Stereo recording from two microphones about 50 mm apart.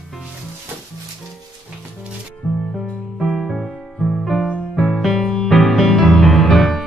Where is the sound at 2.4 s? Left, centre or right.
Left.